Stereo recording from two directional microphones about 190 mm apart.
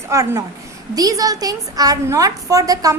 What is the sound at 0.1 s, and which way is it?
A woman's voice, 15° right (ahead or behind).